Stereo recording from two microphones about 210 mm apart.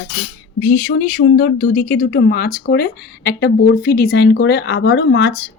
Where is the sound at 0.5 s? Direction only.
45° left (ahead or behind).